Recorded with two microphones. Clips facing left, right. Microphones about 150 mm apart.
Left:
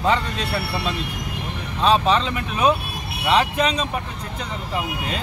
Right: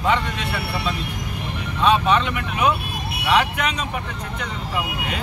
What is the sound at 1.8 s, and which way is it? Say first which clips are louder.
Speech: even; 30° left (ahead or behind).